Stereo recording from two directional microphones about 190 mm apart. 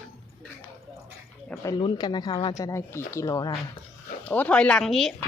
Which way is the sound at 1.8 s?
25° left (ahead or behind).